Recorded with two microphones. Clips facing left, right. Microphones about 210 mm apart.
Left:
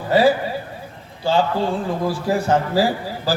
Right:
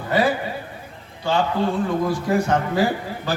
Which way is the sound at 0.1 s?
30° left (ahead or behind).